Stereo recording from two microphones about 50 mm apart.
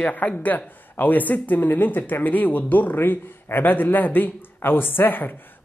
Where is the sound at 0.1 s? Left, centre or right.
Left.